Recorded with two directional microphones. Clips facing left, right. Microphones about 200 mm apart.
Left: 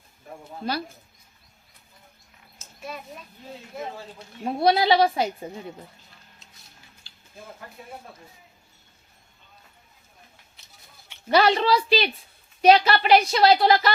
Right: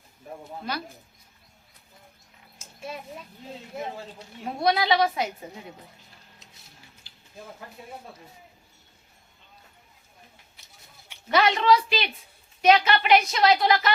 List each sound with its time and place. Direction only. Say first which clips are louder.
4.4 s a woman's voice: left 4 dB; 30° left (ahead or behind)
11.3 s a woman's voice: left 1 dB; 35° left (ahead or behind)